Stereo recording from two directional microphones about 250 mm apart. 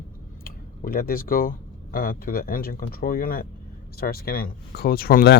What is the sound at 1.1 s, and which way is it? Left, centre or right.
Speech, left.